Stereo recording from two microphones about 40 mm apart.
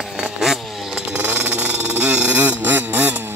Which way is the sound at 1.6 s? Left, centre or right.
Right.